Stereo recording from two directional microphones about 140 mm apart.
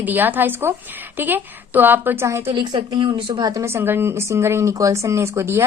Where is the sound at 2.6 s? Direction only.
35° right (ahead or behind).